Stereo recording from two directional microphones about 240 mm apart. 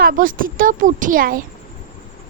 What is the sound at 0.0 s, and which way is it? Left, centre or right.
Speech, right.